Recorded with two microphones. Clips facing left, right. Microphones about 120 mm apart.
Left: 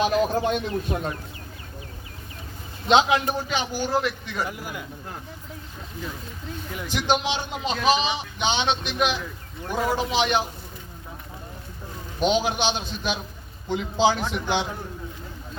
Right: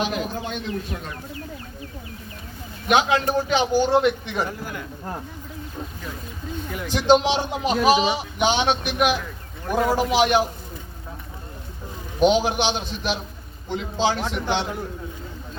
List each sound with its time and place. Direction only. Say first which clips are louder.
0.4 s a man's voice: left 4 dB; 45° left (ahead or behind)
2.8 s a man's voice: even; 25° left (ahead or behind)
3.5 s a man's voice: right 8 dB; 20° right (ahead or behind)
4.4 s a man's voice: right 2 dB; 10° left (ahead or behind)
6.9 s a man's voice: right 7 dB; 15° right (ahead or behind)
12.2 s a man's voice: right 4 dB; 15° right (ahead or behind)
13.7 s a man's voice: left 2 dB; 10° left (ahead or behind)